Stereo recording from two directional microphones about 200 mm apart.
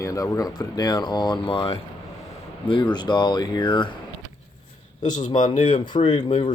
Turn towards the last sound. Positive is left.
turn(degrees=30)  # may be behind; listen again after turning